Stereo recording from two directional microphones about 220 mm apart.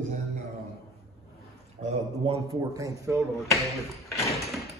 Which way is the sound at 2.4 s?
15° right (ahead or behind).